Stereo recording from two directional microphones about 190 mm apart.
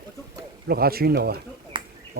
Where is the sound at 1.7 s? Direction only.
25° right (ahead or behind).